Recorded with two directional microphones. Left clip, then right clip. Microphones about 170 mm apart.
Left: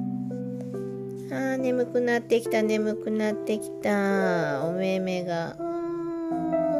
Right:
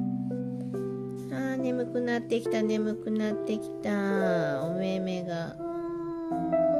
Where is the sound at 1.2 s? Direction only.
15° left (ahead or behind).